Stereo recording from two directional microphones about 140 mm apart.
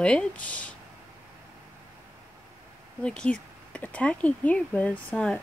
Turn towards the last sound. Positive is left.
turn(degrees=10)  # may be behind; listen again after turning